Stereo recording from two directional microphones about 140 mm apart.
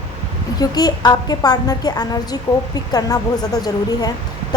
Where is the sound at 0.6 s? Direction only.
30° left (ahead or behind).